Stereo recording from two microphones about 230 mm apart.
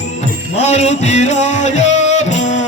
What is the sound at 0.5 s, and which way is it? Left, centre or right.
Music, left.